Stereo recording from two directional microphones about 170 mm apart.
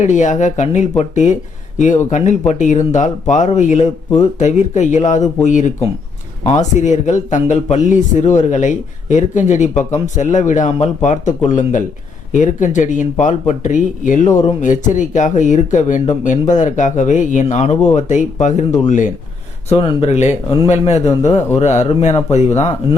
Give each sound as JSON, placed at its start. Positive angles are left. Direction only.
{"t": 0.0, "sound": "speech", "side_deg": 45}
{"t": 19.6, "sound": "a man's voice", "side_deg": 35}